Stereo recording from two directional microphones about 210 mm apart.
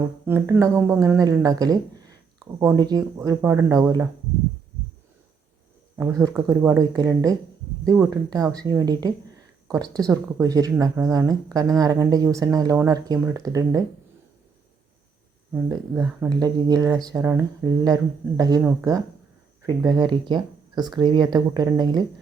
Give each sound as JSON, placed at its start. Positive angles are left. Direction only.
{"t": 0.3, "sound": "speech", "side_deg": -10}
{"t": 6.0, "sound": "speech", "side_deg": -15}
{"t": 15.5, "sound": "speech", "side_deg": -10}